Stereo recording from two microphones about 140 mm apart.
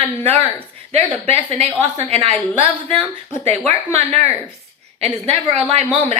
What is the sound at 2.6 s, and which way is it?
Speech, 10° left (ahead or behind).